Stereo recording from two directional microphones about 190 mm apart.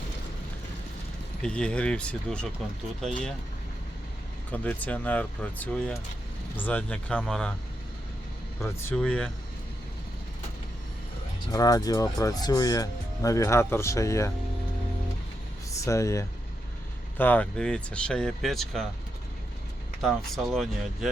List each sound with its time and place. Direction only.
1.4 s speech: 5° left (ahead or behind)
4.5 s speech: 10° left (ahead or behind)
8.6 s speech: 10° left (ahead or behind)
11.5 s speech: 20° left (ahead or behind)
15.7 s speech: 15° left (ahead or behind)
20.0 s speech: centre (ahead or behind)